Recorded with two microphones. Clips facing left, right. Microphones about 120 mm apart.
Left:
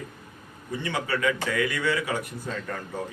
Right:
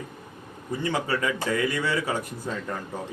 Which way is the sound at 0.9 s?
30° right (ahead or behind).